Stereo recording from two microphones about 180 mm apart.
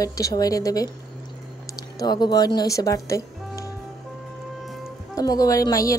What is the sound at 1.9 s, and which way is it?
Speech, 20° left (ahead or behind).